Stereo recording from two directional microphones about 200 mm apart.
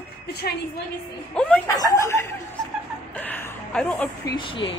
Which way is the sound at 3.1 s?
10° left (ahead or behind).